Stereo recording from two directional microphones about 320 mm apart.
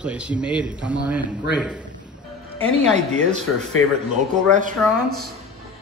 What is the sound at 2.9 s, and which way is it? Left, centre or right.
Speech, right.